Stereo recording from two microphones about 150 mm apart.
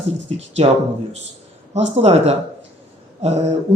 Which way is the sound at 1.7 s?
45° right (ahead or behind).